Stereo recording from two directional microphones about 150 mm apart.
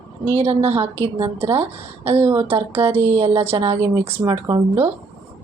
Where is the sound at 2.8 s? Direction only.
45° right (ahead or behind).